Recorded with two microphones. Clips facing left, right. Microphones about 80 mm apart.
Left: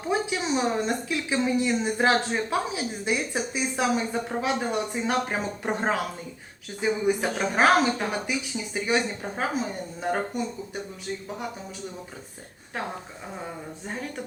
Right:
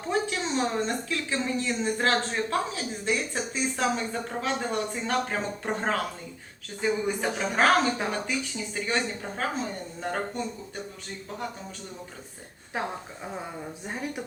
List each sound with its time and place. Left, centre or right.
0.1 s speech: centre
13.3 s a woman's voice: centre